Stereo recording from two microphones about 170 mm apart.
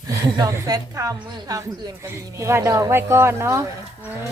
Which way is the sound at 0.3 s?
20° right (ahead or behind).